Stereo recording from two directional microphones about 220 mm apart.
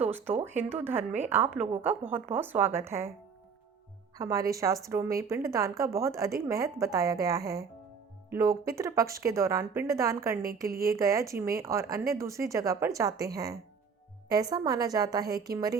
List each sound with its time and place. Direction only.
0.4 s a woman's voice: 10° right (ahead or behind)
4.2 s a woman's voice: 15° right (ahead or behind)
10.7 s speech: 40° right (ahead or behind)
10.9 s a woman's voice: 15° right (ahead or behind)